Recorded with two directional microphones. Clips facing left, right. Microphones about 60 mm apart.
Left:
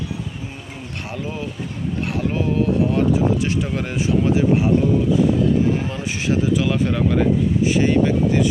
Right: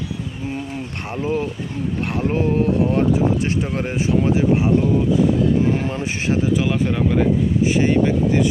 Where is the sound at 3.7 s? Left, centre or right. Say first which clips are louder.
Right 1 dB; right.